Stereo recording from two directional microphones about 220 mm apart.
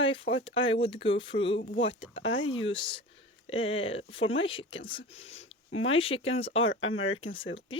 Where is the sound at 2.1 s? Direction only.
60° left (ahead or behind).